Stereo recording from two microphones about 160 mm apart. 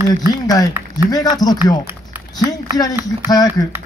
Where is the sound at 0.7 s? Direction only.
15° right (ahead or behind).